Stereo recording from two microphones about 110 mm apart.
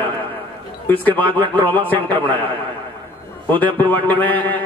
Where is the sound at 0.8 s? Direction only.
15° left (ahead or behind).